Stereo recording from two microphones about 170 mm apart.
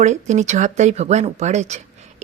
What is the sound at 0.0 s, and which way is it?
Speech, 45° right (ahead or behind).